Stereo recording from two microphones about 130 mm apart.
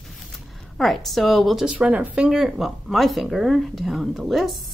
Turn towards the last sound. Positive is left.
turn(degrees=0)  # may be behind; listen again after turning